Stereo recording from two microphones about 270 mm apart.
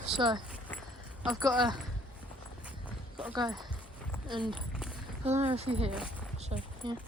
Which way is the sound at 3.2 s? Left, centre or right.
Centre.